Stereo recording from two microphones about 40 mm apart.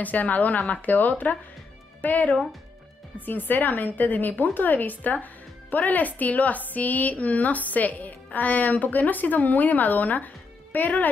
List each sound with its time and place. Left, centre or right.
0.0 s a woman's voice: left
2.0 s music: left
3.2 s a woman's voice: left